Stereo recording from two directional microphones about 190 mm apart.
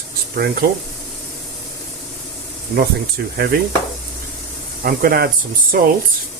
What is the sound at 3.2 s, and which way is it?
Speech, 55° right (ahead or behind).